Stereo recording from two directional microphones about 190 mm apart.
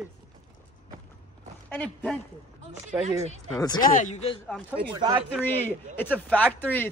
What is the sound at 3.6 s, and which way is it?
Speech, 20° left (ahead or behind).